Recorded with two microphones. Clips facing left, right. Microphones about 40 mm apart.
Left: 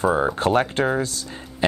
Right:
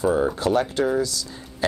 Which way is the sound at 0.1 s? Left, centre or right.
Left.